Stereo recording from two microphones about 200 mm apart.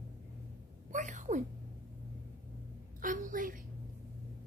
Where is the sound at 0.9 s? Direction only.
40° right (ahead or behind).